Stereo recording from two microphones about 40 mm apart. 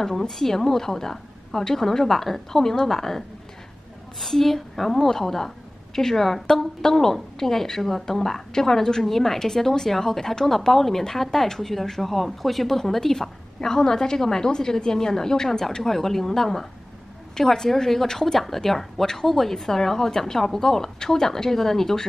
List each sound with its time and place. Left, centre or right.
0.0 s a woman's voice: centre